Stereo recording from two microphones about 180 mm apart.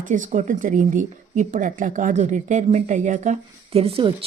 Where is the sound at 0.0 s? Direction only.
45° right (ahead or behind).